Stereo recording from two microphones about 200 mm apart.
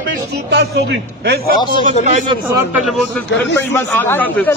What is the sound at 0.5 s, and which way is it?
Speech, 55° right (ahead or behind).